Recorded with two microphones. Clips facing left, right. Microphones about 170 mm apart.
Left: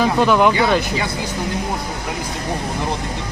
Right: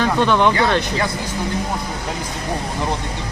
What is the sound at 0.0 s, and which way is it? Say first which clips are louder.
Speech: left 2 dB; 5° left (ahead or behind).